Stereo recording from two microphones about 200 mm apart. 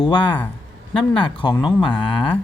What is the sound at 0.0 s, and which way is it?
Speech, 25° left (ahead or behind).